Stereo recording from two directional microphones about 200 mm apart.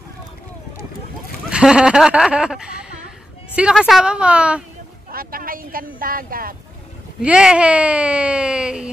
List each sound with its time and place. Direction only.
1.5 s speech: 5° right (ahead or behind)
5.1 s a sound: 45° right (ahead or behind)
7.2 s speech: 5° right (ahead or behind)